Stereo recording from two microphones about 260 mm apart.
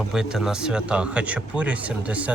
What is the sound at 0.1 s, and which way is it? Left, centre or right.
Speech, centre.